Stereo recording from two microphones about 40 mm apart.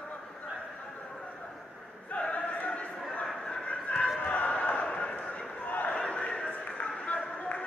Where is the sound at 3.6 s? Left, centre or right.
Left.